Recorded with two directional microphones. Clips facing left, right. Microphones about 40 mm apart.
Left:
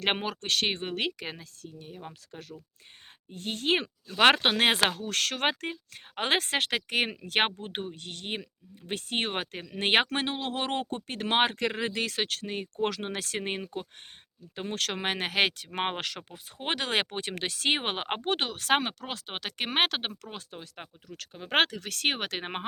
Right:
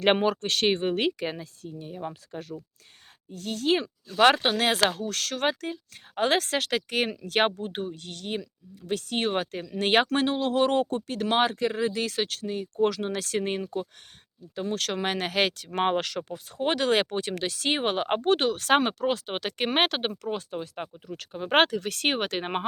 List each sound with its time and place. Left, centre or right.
0.0 s speech: centre
3.3 s speech: left
5.0 s speech: left
10.9 s speech: left
11.5 s speech: left
14.5 s speech: left
15.0 s speech: left
18.2 s speech: centre
18.8 s speech: centre